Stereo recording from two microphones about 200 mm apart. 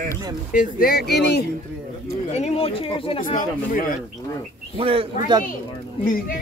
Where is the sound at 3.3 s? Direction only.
40° left (ahead or behind).